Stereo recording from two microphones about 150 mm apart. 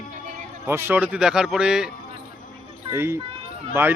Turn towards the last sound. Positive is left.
turn(degrees=-15)  # may be behind; listen again after turning